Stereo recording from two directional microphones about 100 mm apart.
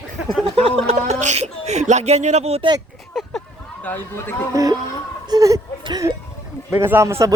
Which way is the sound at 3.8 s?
20° left (ahead or behind).